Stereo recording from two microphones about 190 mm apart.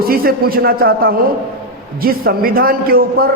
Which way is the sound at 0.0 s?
50° right (ahead or behind).